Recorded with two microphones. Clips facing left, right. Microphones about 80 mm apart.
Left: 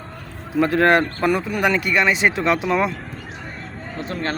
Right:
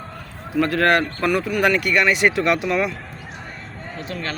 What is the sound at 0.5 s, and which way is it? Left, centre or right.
Speech, left.